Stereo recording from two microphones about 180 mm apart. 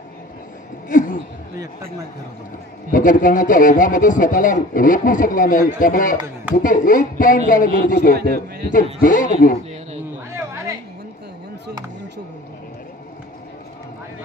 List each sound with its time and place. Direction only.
0.8 s a sound: 50° left (ahead or behind)
1.6 s a man's voice: 15° right (ahead or behind)
2.9 s speech: 50° left (ahead or behind)